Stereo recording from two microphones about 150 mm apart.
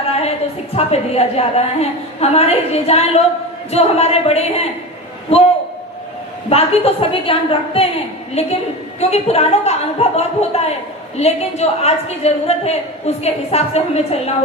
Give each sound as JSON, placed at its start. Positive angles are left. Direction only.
{"t": 0.8, "sound": "a woman's voice", "side_deg": 45}
{"t": 6.5, "sound": "a woman's voice", "side_deg": 40}